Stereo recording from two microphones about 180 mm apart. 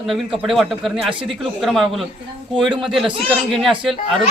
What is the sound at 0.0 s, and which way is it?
A man's voice, centre (ahead or behind).